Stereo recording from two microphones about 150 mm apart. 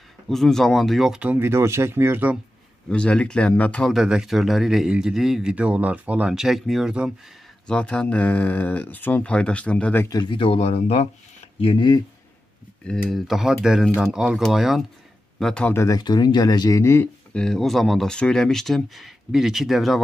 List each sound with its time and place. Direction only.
0.3 s speech: centre (ahead or behind); by 2.3 s 15° right (ahead or behind)
2.9 s speech: 5° left (ahead or behind)
7.6 s speech: 5° left (ahead or behind)
10.0 s speech: 30° left (ahead or behind)
13.1 s speech: centre (ahead or behind)
15.8 s speech: 25° left (ahead or behind); by 20.0 s centre (ahead or behind)